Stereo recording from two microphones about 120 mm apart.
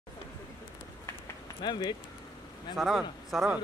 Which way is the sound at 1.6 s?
35° left (ahead or behind).